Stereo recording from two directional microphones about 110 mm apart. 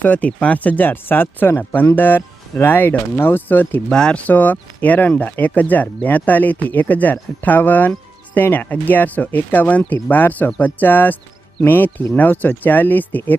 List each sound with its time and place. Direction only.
0.0 s speech: 15° left (ahead or behind)